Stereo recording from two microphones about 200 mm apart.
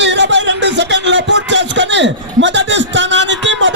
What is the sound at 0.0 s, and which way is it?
Music, 60° right (ahead or behind).